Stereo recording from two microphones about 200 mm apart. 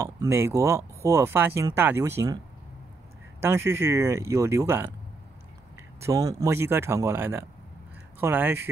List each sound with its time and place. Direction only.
0.0 s speech: 15° right (ahead or behind)
3.3 s speech: 15° right (ahead or behind)
6.0 s speech: 15° right (ahead or behind)